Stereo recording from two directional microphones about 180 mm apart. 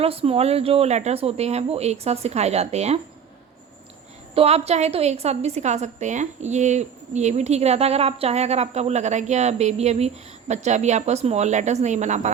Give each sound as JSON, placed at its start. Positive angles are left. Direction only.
{"t": 0.0, "sound": "a woman's voice", "side_deg": -35}
{"t": 4.4, "sound": "a woman's voice", "side_deg": -35}